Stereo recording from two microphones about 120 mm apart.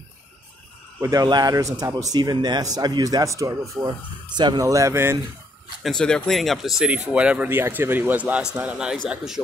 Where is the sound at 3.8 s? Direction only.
40° right (ahead or behind); by 5.1 s 20° right (ahead or behind).